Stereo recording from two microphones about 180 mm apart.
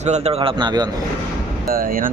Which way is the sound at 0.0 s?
40° right (ahead or behind).